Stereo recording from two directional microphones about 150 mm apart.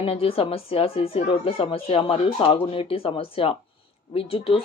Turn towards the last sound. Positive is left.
turn(degrees=40)  # may be behind; listen again after turning